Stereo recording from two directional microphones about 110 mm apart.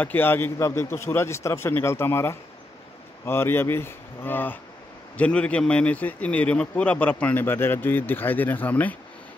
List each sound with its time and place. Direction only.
0.0 s a man's voice: 20° left (ahead or behind)